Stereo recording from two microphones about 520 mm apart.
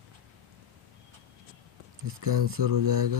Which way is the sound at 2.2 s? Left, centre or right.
Right.